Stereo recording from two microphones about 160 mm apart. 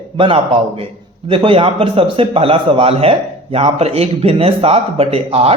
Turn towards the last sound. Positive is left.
turn(degrees=-40)  # may be behind; listen again after turning